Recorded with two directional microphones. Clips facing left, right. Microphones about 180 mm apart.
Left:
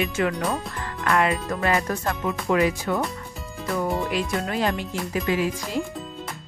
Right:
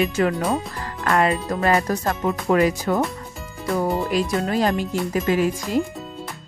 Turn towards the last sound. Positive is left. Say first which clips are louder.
# right 4 dB
turn(degrees=-45)  # may be behind; listen again after turning